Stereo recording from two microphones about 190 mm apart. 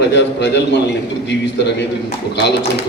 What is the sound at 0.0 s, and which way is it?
Speech, 65° left (ahead or behind).